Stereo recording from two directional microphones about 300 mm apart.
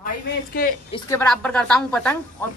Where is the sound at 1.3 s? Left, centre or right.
Centre.